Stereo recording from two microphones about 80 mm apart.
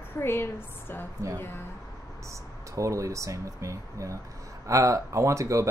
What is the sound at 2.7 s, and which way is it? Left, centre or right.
Speech, right.